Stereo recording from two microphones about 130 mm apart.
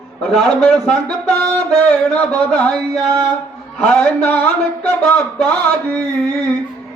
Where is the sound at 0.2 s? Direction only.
5° left (ahead or behind).